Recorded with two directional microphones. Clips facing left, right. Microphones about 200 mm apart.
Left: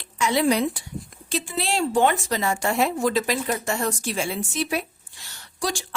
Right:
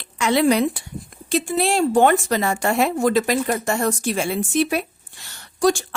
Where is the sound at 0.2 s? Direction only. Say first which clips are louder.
Right 4 dB; 65° right (ahead or behind).